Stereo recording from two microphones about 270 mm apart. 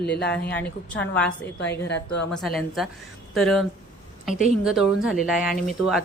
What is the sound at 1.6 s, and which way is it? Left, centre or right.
Speech, left.